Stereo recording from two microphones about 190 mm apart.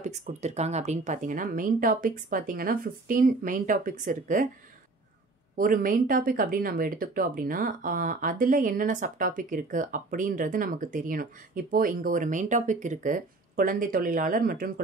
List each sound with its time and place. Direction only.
0.0 s speech: 35° right (ahead or behind)
5.6 s speech: 45° right (ahead or behind)